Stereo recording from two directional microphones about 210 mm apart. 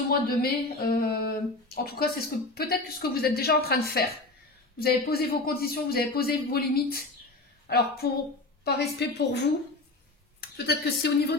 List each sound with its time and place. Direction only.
0.3 s a woman's voice: 45° left (ahead or behind)